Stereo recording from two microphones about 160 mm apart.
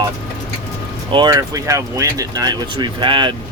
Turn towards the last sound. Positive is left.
turn(degrees=-30)  # may be behind; listen again after turning